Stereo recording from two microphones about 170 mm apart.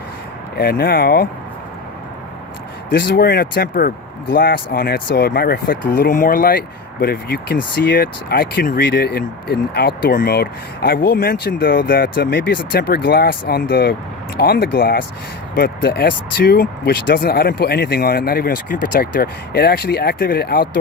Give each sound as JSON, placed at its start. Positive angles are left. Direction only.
{"t": 0.5, "sound": "speech", "side_deg": 65}
{"t": 2.9, "sound": "speech", "side_deg": 70}